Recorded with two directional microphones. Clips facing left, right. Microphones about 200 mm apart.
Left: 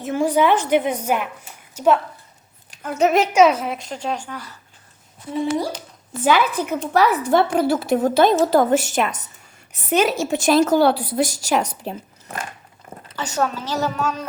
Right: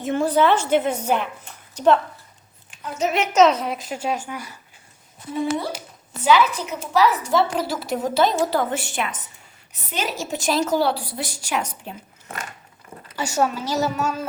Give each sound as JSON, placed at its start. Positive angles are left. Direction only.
{"t": 0.0, "sound": "a woman's voice", "side_deg": 10}
{"t": 2.6, "sound": "a sound", "side_deg": 50}
{"t": 3.3, "sound": "speech", "side_deg": 10}
{"t": 6.2, "sound": "a woman's voice", "side_deg": 50}
{"t": 9.9, "sound": "a woman's voice", "side_deg": 55}
{"t": 13.1, "sound": "speech", "side_deg": -10}